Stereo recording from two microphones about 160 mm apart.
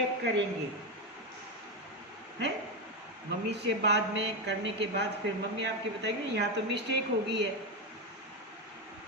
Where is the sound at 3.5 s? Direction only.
90° right.